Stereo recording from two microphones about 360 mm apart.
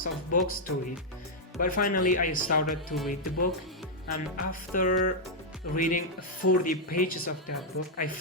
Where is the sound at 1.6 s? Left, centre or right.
Left.